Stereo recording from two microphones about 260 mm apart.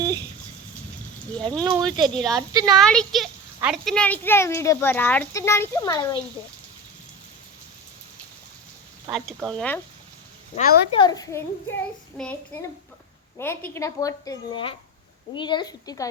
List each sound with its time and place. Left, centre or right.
1.5 s speech: centre
1.7 s speech: centre
2.1 s speech: centre
9.0 s speech: centre
10.5 s a woman's voice: left
10.9 s speech: centre
13.4 s speech: centre